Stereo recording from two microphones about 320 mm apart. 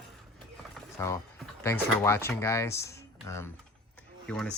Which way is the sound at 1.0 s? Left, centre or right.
Centre.